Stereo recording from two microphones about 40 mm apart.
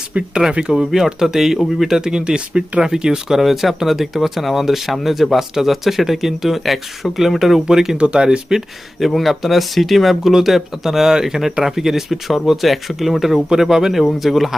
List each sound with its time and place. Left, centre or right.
0.1 s speech: right
0.7 s speech: centre
2.0 s speech: centre
7.9 s speech: right
9.0 s speech: centre